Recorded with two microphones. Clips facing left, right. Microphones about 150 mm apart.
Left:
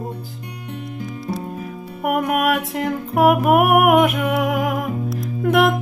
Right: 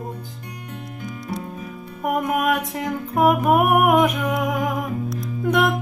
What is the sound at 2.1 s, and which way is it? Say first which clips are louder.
Music: left 2 dB; 5° left (ahead or behind).